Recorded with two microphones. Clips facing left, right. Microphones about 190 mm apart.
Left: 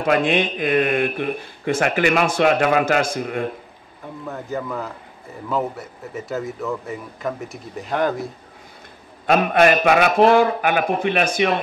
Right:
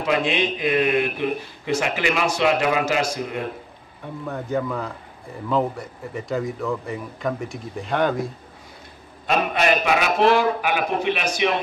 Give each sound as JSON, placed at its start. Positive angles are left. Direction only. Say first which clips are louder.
{"t": 0.0, "sound": "a man's voice", "louder": "left 3 dB", "side_deg": 50}
{"t": 4.3, "sound": "speech", "louder": "right 2 dB", "side_deg": 0}
{"t": 9.2, "sound": "a man's voice", "louder": "left 6 dB", "side_deg": 55}